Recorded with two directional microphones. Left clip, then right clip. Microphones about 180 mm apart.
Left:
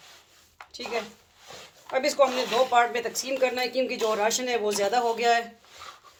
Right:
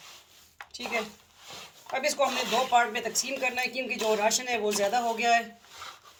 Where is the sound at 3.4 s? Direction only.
50° left (ahead or behind).